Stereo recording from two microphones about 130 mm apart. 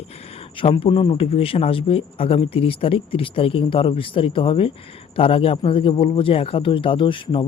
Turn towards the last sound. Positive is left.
turn(degrees=40)  # may be behind; listen again after turning